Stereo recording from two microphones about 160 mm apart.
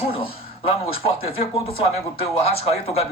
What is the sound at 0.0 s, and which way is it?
Speech, 35° left (ahead or behind).